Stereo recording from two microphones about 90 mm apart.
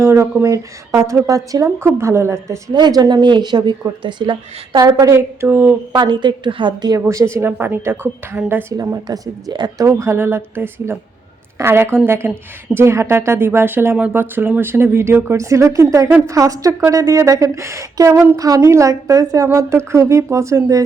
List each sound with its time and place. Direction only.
0.0 s speech: 30° right (ahead or behind)
2.7 s a woman's voice: 50° right (ahead or behind)
4.8 s speech: 45° right (ahead or behind)
5.1 s a woman's voice: 25° right (ahead or behind)
6.0 s a woman's voice: 55° right (ahead or behind)
7.1 s a woman's voice: 35° right (ahead or behind)
8.8 s speech: 45° right (ahead or behind)
9.8 s a woman's voice: 30° right (ahead or behind)
19.5 s speech: 30° right (ahead or behind)